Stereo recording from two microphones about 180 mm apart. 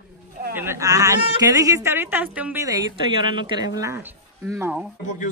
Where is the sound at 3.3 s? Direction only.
25° right (ahead or behind).